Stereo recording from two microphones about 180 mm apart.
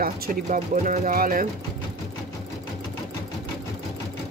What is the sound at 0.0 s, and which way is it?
Speech, 50° right (ahead or behind).